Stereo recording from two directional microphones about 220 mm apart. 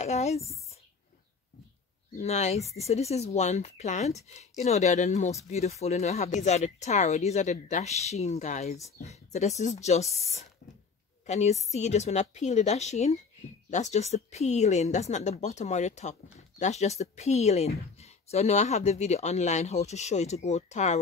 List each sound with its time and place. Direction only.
0.0 s speech: 30° left (ahead or behind)
2.1 s speech: 30° left (ahead or behind)